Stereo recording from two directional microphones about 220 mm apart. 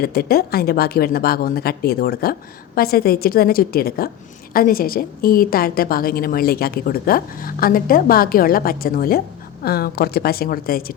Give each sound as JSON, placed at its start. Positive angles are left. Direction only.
{"t": 0.0, "sound": "a woman's voice", "side_deg": 45}